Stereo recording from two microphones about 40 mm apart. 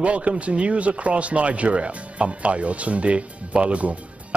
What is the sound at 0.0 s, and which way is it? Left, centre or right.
Speech, right.